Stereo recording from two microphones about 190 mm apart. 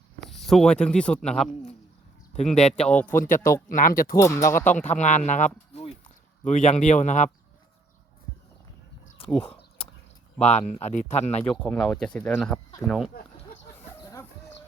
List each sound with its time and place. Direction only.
0.3 s speech: centre (ahead or behind)
2.7 s speech: 5° left (ahead or behind)
3.2 s speech: 45° left (ahead or behind)
4.2 s speech: 15° left (ahead or behind)
4.9 s speech: 40° left (ahead or behind)
5.7 s a sound: 35° left (ahead or behind)
6.4 s speech: 40° left (ahead or behind)
9.4 s a sound: 30° left (ahead or behind)
10.4 s speech: 35° left (ahead or behind)
11.4 s speech: 5° left (ahead or behind)
13.9 s a sound: 15° left (ahead or behind)